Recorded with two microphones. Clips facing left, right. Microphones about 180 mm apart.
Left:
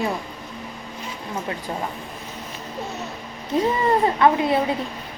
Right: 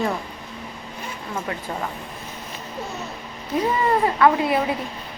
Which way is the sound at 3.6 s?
25° left (ahead or behind).